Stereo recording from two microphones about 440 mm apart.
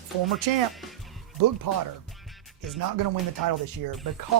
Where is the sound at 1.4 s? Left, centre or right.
Right.